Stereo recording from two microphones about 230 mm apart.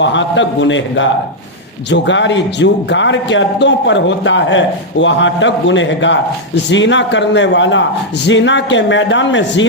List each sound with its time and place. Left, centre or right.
0.0 s a man's voice: left